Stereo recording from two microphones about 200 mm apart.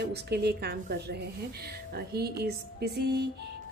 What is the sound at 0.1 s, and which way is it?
A woman's voice, 55° right (ahead or behind).